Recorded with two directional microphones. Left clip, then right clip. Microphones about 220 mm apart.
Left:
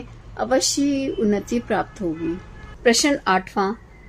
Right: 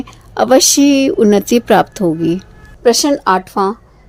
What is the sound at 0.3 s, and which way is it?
Speech, 40° right (ahead or behind).